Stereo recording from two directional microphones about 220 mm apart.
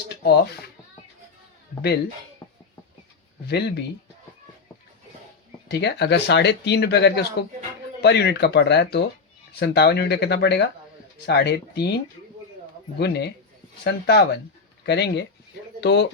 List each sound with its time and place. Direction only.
2.4 s a sound: 15° left (ahead or behind)
3.4 s speech: 50° left (ahead or behind)
5.7 s speech: 50° left (ahead or behind)